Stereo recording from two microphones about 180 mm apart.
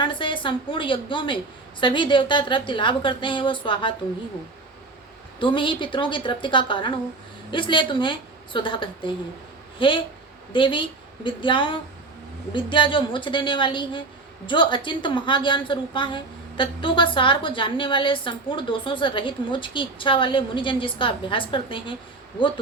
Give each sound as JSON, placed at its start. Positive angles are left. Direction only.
{"t": 0.0, "sound": "a woman's voice", "side_deg": 30}
{"t": 5.4, "sound": "a woman's voice", "side_deg": 30}